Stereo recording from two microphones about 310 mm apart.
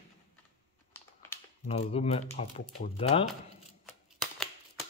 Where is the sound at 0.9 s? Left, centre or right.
Centre.